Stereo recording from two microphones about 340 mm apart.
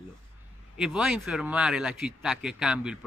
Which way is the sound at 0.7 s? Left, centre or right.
Centre.